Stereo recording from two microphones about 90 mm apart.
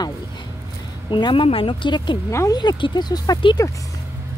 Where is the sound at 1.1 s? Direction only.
65° left (ahead or behind); by 3.4 s 45° left (ahead or behind).